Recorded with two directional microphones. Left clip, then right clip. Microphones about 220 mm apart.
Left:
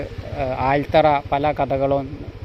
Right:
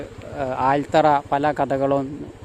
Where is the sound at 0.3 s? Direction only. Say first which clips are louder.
Even; 20° right (ahead or behind).